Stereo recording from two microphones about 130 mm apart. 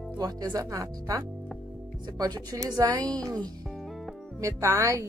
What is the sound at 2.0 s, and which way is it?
Music, 30° right (ahead or behind).